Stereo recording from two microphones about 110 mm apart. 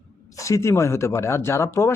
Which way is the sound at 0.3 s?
30° left (ahead or behind).